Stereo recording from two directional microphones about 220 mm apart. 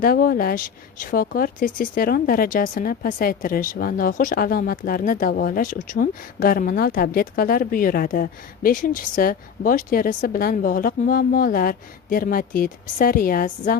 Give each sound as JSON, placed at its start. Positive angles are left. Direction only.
{"t": 0.0, "sound": "speech", "side_deg": 40}